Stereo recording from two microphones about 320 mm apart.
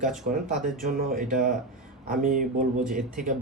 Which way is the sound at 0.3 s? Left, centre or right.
Right.